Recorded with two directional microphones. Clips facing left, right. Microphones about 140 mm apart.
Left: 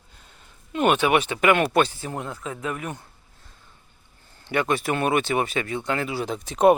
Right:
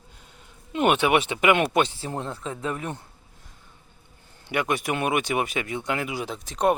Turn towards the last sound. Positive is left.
turn(degrees=5)  # may be behind; listen again after turning